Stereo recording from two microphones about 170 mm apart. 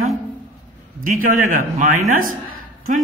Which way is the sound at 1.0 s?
50° right (ahead or behind).